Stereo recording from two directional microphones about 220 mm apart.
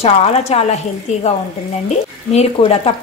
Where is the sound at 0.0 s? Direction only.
30° left (ahead or behind).